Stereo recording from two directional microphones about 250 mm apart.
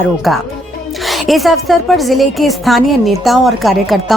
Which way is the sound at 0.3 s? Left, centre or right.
Centre.